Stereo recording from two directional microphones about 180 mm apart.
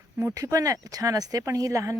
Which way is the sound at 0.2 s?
15° right (ahead or behind).